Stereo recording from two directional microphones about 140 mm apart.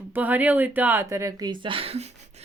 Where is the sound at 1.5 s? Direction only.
35° right (ahead or behind).